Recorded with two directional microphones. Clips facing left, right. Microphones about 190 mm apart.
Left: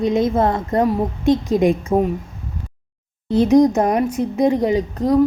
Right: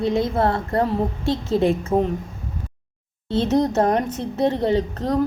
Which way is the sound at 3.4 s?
15° left (ahead or behind).